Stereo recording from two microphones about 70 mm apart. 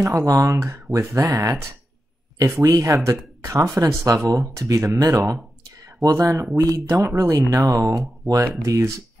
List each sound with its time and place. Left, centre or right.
0.1 s speech: right